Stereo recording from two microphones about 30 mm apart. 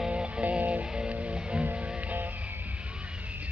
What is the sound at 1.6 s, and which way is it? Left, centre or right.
Music, right.